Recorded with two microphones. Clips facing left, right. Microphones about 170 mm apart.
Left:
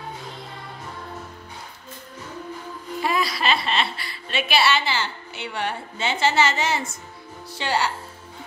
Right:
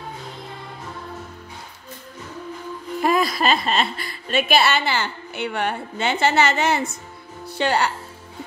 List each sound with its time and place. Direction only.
3.0 s a woman's voice: 50° right (ahead or behind)